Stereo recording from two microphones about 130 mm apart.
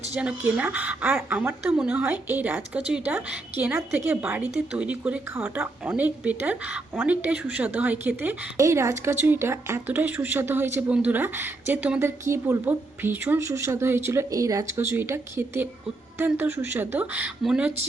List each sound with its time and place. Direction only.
0.2 s a woman's voice: 10° right (ahead or behind)